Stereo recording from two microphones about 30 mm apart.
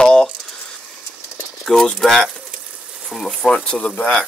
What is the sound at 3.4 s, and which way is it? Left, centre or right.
Speech, left.